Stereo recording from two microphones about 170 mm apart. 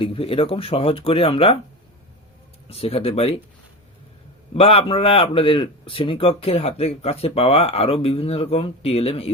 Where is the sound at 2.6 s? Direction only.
35° left (ahead or behind).